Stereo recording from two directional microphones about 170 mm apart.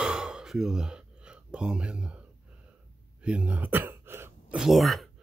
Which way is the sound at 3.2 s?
5° right (ahead or behind).